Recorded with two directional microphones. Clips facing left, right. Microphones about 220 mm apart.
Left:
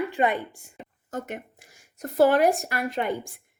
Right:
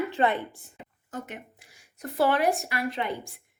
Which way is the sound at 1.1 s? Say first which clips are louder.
Left 4 dB; 45° left (ahead or behind).